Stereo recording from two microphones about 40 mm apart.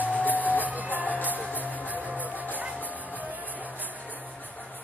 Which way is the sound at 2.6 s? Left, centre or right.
Right.